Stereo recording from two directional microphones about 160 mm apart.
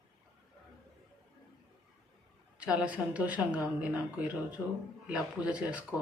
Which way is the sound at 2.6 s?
10° right (ahead or behind).